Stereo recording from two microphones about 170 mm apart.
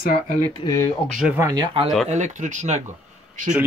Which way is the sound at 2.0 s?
45° right (ahead or behind).